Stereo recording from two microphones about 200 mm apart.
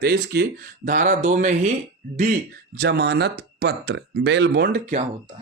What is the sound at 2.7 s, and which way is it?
Speech, 55° right (ahead or behind).